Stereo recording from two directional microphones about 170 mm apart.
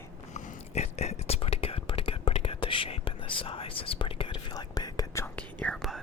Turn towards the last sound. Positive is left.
turn(degrees=0)  # may be behind; listen again after turning